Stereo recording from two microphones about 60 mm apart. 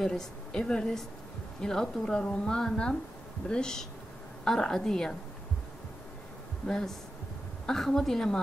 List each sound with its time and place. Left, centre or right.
0.0 s a woman's voice: centre
6.7 s a woman's voice: centre